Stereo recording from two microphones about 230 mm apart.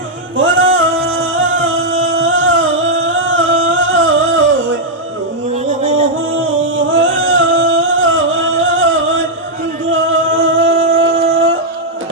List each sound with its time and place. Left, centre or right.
0.3 s singing: right
5.8 s music: right
6.3 s singing: right
9.9 s music: right